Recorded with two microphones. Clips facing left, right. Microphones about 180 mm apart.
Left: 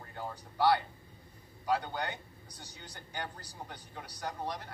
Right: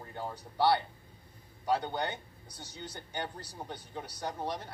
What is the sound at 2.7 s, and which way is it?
Speech, 25° right (ahead or behind).